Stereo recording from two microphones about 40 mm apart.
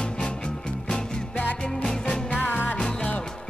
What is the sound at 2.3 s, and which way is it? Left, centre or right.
Music, left.